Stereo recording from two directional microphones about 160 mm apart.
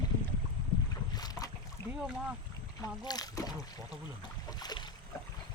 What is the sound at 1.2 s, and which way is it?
Boat, 25° left (ahead or behind).